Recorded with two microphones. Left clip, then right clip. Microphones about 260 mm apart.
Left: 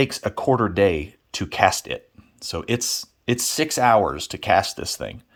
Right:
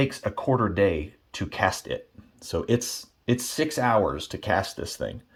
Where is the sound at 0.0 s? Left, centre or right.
Left.